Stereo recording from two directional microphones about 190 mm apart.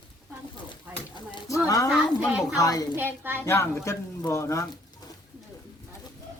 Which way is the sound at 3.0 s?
10° right (ahead or behind).